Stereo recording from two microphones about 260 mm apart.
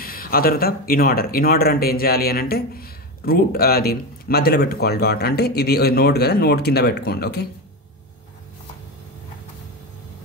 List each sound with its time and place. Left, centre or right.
0.0 s speech: left